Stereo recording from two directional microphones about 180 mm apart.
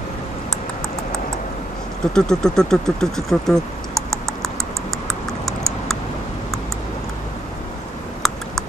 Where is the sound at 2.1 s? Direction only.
5° left (ahead or behind).